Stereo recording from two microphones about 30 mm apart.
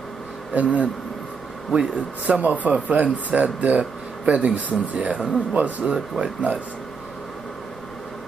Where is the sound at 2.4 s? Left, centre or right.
Right.